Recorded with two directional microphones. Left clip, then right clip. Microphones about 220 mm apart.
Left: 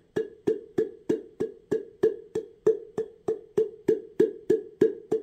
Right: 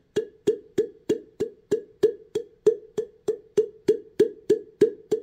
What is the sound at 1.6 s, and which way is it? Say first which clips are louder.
Plop: right 3 dB; 45° right (ahead or behind).